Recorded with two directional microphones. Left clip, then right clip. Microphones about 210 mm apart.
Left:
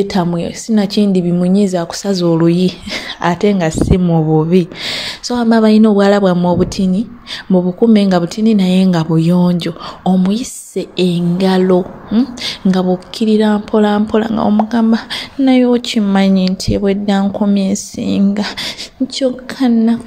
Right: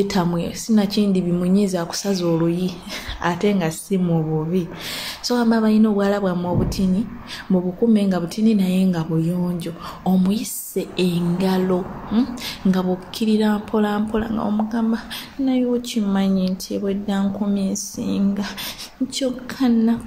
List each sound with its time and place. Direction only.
0.0 s a woman's voice: 25° left (ahead or behind)